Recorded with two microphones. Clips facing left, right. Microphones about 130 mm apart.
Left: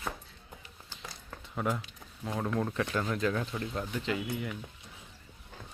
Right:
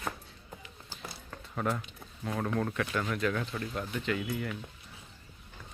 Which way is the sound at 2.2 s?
15° left (ahead or behind).